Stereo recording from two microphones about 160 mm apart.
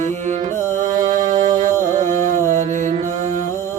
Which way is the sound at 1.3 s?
25° right (ahead or behind).